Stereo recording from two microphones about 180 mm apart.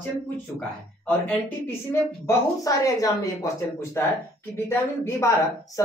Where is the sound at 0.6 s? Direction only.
10° left (ahead or behind).